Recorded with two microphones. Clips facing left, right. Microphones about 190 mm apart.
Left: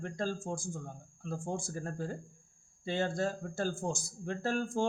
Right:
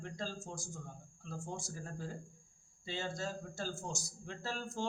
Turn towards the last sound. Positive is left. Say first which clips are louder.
# left 9 dB
turn(degrees=55)  # may be behind; listen again after turning